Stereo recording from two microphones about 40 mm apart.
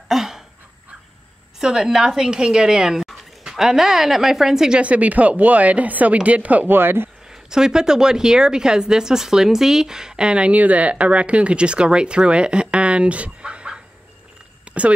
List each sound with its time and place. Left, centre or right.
0.1 s a sound: centre
1.6 s a woman's voice: centre
4.7 s speech: right
6.7 s speech: right
7.2 s a woman's voice: centre
10.6 s speech: right
14.6 s a sound: right